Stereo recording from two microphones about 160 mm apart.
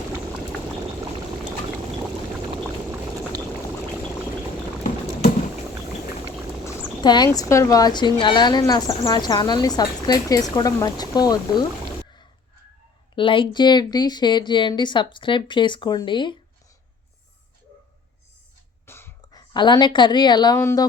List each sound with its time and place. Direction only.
6.7 s a sound: 25° left (ahead or behind)
7.3 s a woman's voice: 20° left (ahead or behind)
13.1 s a woman's voice: 30° left (ahead or behind)
18.9 s a woman's voice: 15° left (ahead or behind)